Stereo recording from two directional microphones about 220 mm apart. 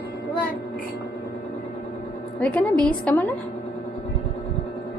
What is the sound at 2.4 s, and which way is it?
Speech, 5° left (ahead or behind).